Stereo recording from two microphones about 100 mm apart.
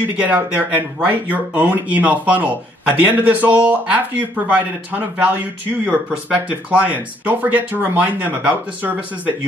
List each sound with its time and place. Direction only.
0.0 s speech: 15° right (ahead or behind)